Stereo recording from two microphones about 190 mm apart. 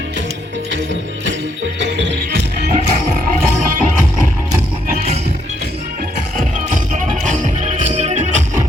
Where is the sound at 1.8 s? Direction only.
70° right (ahead or behind); by 2.8 s 50° right (ahead or behind).